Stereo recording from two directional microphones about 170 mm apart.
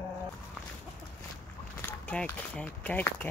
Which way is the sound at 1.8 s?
10° left (ahead or behind).